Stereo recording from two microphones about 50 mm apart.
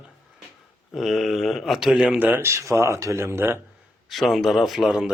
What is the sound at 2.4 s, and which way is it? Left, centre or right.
Speech, right.